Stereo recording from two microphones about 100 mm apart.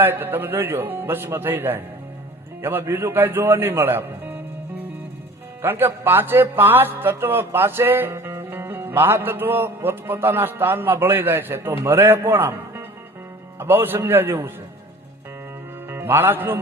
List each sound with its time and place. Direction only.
0.0 s a man's voice: 20° right (ahead or behind)
5.6 s a man's voice: 20° right (ahead or behind)
15.9 s a man's voice: 25° right (ahead or behind)